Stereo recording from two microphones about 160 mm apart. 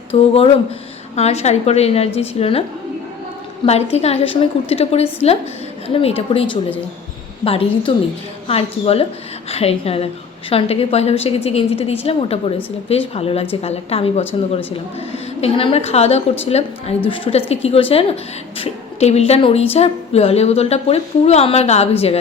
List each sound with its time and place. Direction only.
0.1 s a woman's voice: 35° left (ahead or behind)
3.7 s a woman's voice: 40° left (ahead or behind)